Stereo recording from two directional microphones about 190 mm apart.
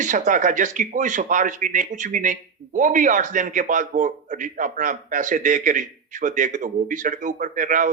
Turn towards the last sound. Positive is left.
turn(degrees=-45)  # may be behind; listen again after turning